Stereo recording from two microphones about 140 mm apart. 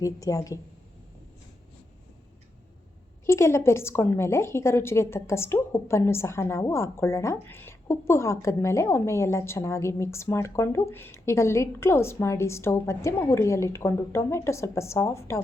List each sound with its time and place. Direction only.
0.0 s a woman's voice: 25° left (ahead or behind)
3.2 s a woman's voice: 20° left (ahead or behind)